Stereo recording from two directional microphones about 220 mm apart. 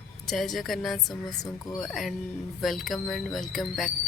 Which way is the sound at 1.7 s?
Centre (ahead or behind).